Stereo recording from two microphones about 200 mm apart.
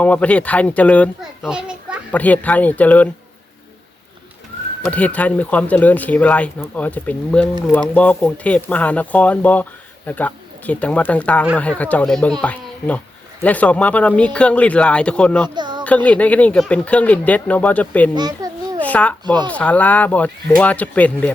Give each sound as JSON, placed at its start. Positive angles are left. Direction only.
{"t": 0.0, "sound": "speech", "side_deg": 5}
{"t": 1.5, "sound": "a child's voice", "side_deg": -5}
{"t": 2.1, "sound": "speech", "side_deg": 10}
{"t": 4.8, "sound": "speech", "side_deg": 5}
{"t": 15.4, "sound": "speech", "side_deg": -20}
{"t": 15.8, "sound": "speech", "side_deg": 5}
{"t": 18.1, "sound": "a child's voice", "side_deg": -20}
{"t": 18.8, "sound": "a sound", "side_deg": 5}
{"t": 19.2, "sound": "speech", "side_deg": -20}
{"t": 19.5, "sound": "speech", "side_deg": 5}